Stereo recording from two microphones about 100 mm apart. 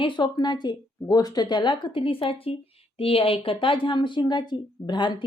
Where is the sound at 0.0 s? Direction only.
45° left (ahead or behind).